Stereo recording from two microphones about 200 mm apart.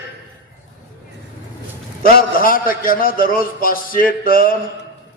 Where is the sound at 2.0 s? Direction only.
45° left (ahead or behind).